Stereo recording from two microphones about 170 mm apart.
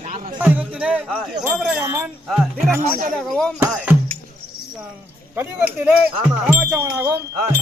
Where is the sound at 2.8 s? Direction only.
60° right (ahead or behind).